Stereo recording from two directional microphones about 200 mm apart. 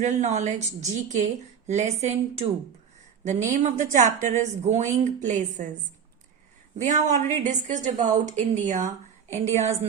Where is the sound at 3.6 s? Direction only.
40° right (ahead or behind).